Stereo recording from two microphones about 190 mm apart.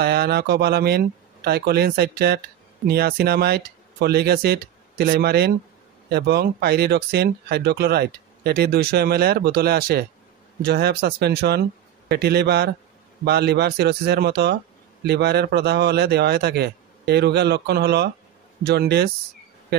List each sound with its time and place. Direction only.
0.0 s speech: 55° right (ahead or behind)